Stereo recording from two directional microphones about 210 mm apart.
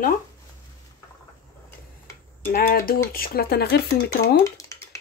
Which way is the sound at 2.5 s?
45° left (ahead or behind).